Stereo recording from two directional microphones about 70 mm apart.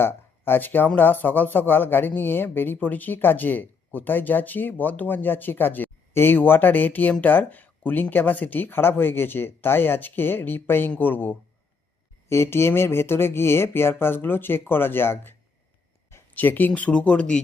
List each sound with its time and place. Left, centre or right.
0.0 s speech: left
12.3 s speech: left; by 17.4 s centre